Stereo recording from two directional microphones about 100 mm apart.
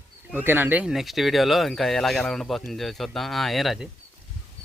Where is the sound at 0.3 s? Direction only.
20° right (ahead or behind).